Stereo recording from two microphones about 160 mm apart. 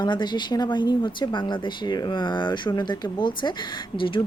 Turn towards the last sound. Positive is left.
turn(degrees=30)  # may be behind; listen again after turning